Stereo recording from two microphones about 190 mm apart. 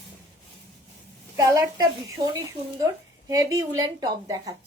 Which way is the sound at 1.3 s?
20° right (ahead or behind).